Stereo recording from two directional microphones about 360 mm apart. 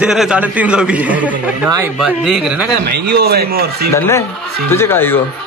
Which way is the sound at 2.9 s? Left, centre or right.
Right.